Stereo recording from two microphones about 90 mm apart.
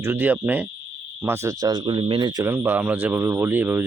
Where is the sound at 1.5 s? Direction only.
50° right (ahead or behind).